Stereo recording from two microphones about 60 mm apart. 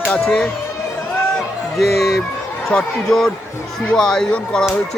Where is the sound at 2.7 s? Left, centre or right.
Left.